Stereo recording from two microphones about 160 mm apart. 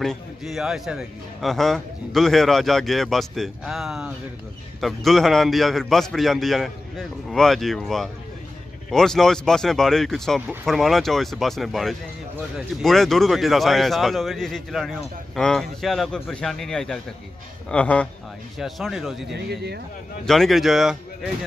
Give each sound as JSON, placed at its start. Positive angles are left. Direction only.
{"t": 0.0, "sound": "a man's voice", "side_deg": 0}
{"t": 19.3, "sound": "speech", "side_deg": -90}
{"t": 20.2, "sound": "speech", "side_deg": 0}